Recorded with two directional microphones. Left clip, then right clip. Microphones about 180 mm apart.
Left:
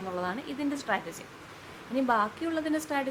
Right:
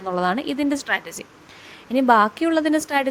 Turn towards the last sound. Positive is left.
turn(degrees=-50)  # may be behind; listen again after turning